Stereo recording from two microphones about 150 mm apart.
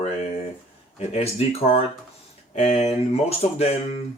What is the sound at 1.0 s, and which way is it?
Speech, 45° left (ahead or behind).